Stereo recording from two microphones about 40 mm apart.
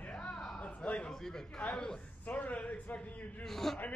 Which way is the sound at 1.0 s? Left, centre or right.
Centre.